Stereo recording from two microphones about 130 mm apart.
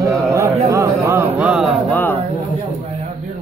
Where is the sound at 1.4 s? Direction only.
5° right (ahead or behind).